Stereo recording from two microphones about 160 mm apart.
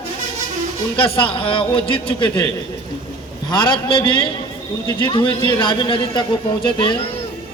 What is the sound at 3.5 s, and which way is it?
A man's voice, 30° left (ahead or behind).